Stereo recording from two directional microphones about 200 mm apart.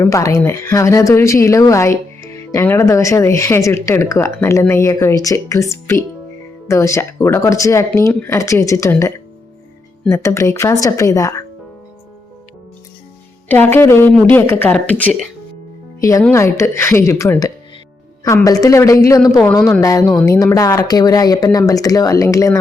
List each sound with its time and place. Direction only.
0.0 s speech: 15° left (ahead or behind)
13.5 s a woman's voice: 10° left (ahead or behind)